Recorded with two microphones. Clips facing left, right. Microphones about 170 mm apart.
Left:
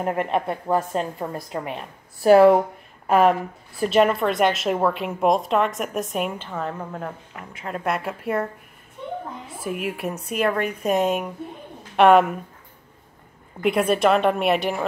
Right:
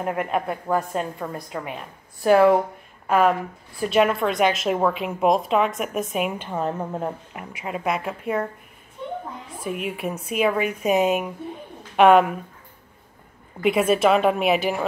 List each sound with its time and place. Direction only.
0.0 s a woman's voice: centre (ahead or behind)
1.2 s a woman's voice: 20° left (ahead or behind)
2.3 s speech: 5° left (ahead or behind)
3.8 s a woman's voice: centre (ahead or behind); by 7.4 s 20° right (ahead or behind)
7.6 s a woman's voice: 5° right (ahead or behind)
9.6 s a woman's voice: centre (ahead or behind)
13.6 s a woman's voice: centre (ahead or behind)